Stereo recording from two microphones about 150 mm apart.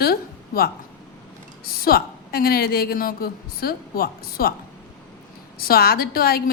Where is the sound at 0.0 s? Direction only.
90° left.